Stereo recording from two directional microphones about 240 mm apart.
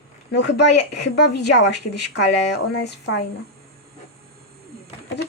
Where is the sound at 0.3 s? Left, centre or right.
Left.